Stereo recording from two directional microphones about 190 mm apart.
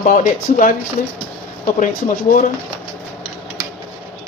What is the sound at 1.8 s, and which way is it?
Speech, 45° left (ahead or behind).